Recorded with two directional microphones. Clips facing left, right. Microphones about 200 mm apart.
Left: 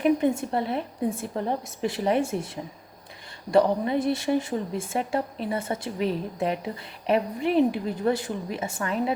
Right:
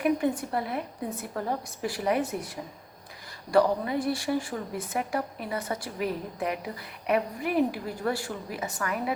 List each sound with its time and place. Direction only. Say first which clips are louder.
0.0 s a woman's voice: left 4 dB; 25° left (ahead or behind)
3.5 s a woman's voice: left 2 dB; 25° left (ahead or behind)